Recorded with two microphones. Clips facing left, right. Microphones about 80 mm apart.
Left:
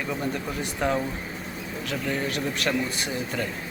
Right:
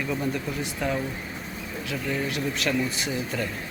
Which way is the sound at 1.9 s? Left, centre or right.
Left.